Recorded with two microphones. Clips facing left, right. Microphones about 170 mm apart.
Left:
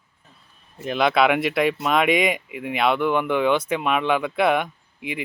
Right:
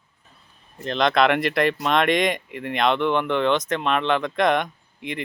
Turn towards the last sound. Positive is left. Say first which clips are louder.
# even
turn(degrees=5)  # may be behind; listen again after turning